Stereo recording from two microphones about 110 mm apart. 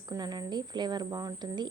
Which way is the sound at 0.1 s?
40° right (ahead or behind).